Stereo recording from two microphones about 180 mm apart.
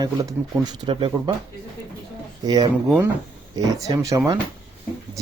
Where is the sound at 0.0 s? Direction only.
20° right (ahead or behind).